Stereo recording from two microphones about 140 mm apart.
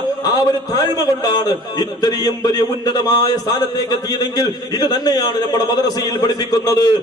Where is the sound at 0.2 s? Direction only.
25° left (ahead or behind).